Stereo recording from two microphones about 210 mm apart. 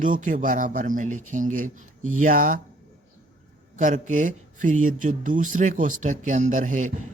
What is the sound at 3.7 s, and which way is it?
Speech, 35° right (ahead or behind).